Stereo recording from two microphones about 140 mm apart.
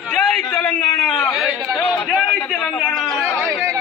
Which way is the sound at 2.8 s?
Centre (ahead or behind).